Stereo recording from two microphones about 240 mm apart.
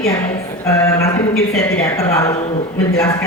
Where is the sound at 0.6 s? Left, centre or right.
Centre.